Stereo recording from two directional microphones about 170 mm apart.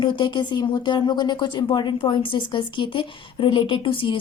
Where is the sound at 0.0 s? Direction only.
30° left (ahead or behind).